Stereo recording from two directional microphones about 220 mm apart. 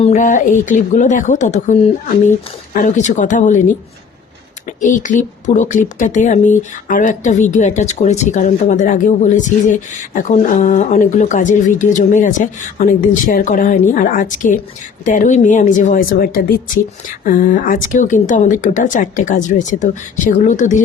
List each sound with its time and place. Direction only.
0.0 s speech: 35° left (ahead or behind)
4.8 s speech: 35° left (ahead or behind)